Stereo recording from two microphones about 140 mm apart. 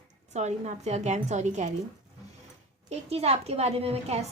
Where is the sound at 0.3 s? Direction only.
55° right (ahead or behind).